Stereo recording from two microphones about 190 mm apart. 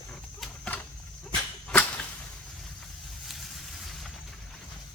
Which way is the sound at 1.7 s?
5° left (ahead or behind).